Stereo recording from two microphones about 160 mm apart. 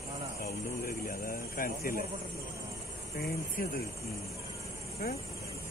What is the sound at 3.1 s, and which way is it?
Speech, 75° left (ahead or behind).